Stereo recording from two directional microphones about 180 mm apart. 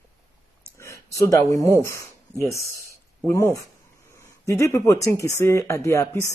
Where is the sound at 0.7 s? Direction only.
15° left (ahead or behind).